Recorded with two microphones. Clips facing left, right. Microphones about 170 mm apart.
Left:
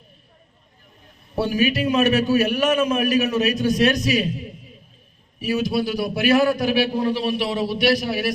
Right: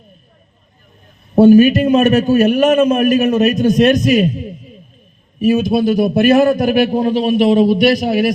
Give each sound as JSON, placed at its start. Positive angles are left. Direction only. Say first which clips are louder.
{"t": 1.4, "sound": "a man's voice", "louder": "right 13 dB", "side_deg": -50}
{"t": 5.5, "sound": "a man's voice", "louder": "right 9 dB", "side_deg": -50}